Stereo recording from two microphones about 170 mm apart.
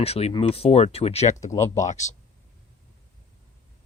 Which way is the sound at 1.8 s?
45° left (ahead or behind).